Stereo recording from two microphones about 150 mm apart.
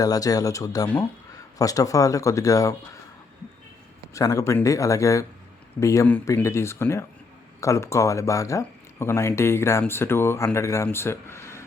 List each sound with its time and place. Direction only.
0.0 s speech: 25° left (ahead or behind)
4.1 s speech: 20° left (ahead or behind)